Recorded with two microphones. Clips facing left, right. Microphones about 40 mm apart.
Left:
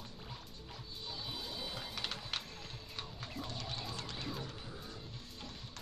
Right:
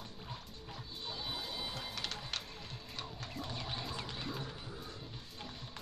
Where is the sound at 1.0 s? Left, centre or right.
Right.